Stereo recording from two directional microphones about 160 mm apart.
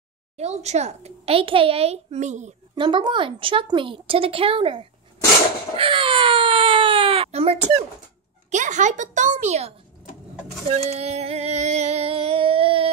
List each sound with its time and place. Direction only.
0.4 s a child's voice: 45° right (ahead or behind)
2.7 s speech: 30° right (ahead or behind)
5.8 s baby cry: 35° right (ahead or behind)
8.5 s a child's voice: 50° right (ahead or behind)
10.9 s a sound: 40° right (ahead or behind)